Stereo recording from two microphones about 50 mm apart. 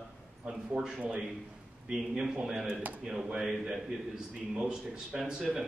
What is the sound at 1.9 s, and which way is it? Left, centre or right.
A man's voice, centre.